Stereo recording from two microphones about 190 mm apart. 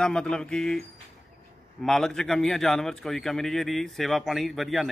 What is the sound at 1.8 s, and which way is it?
A man's voice, 5° left (ahead or behind).